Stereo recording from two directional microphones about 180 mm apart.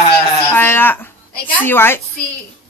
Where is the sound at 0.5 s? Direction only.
10° left (ahead or behind).